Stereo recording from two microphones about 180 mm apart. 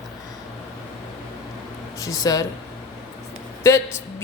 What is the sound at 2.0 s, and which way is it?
Speech, 20° left (ahead or behind).